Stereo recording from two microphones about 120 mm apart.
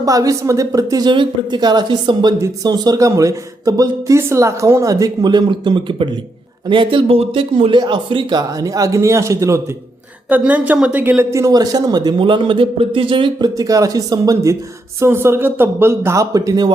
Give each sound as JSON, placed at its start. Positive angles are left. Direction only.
{"t": 0.0, "sound": "speech", "side_deg": -30}
{"t": 10.2, "sound": "speech", "side_deg": -15}
{"t": 13.6, "sound": "speech", "side_deg": -30}